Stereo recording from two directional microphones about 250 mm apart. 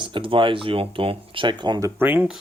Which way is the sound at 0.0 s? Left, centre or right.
Centre.